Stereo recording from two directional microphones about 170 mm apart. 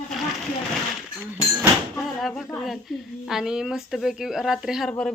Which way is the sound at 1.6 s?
Centre (ahead or behind).